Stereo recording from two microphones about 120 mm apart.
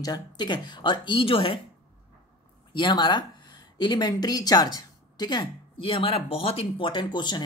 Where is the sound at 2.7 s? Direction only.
40° left (ahead or behind).